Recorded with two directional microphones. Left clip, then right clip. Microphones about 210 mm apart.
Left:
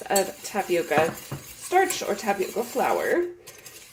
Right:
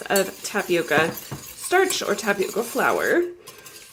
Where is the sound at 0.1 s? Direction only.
40° right (ahead or behind).